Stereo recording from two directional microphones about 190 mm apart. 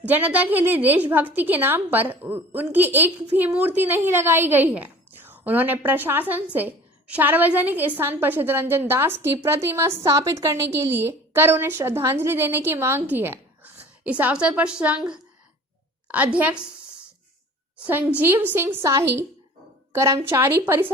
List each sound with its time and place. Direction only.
0.0 s a woman's voice: 10° right (ahead or behind)
17.8 s a woman's voice: 10° right (ahead or behind)